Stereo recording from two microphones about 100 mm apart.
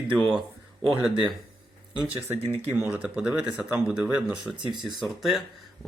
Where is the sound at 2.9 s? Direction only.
10° right (ahead or behind).